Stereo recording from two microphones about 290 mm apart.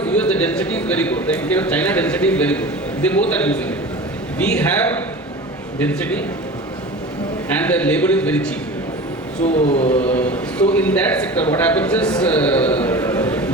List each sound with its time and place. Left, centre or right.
0.1 s a man's voice: centre
7.5 s a man's voice: centre
9.4 s speech: left
10.0 s a man's voice: centre